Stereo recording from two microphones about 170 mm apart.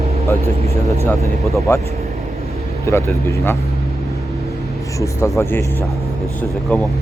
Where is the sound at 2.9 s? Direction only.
15° left (ahead or behind).